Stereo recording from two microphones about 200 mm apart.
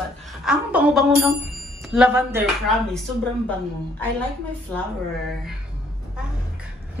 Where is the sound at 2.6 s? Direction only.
5° left (ahead or behind).